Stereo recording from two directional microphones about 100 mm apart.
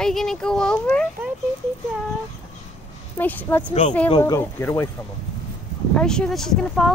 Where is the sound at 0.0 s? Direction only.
5° left (ahead or behind).